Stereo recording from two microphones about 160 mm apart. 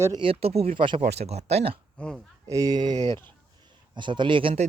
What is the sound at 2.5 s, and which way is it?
Speech, 20° right (ahead or behind).